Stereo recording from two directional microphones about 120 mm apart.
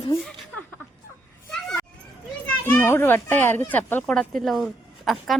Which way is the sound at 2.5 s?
20° left (ahead or behind).